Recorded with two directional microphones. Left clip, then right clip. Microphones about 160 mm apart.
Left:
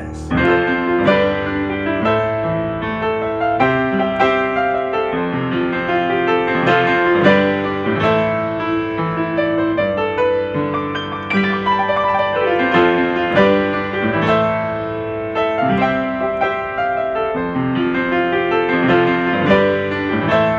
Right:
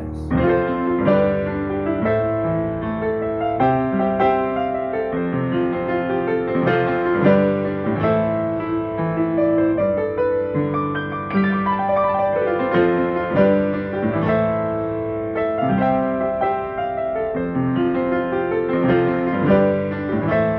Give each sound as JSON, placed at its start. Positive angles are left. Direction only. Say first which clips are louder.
{"t": 0.4, "sound": "music", "louder": "left 4 dB", "side_deg": 10}
{"t": 6.6, "sound": "music", "louder": "left 5 dB", "side_deg": 10}
{"t": 12.4, "sound": "music", "louder": "left 4 dB", "side_deg": 10}
{"t": 18.8, "sound": "music", "louder": "left 4 dB", "side_deg": 10}